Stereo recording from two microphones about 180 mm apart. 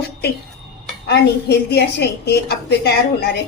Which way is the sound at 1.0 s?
65° left (ahead or behind).